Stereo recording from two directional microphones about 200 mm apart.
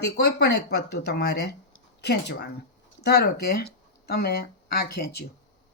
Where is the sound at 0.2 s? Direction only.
55° left (ahead or behind).